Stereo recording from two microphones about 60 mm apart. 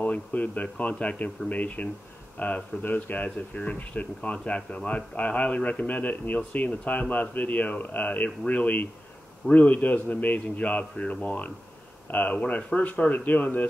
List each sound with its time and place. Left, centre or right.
0.0 s speech: left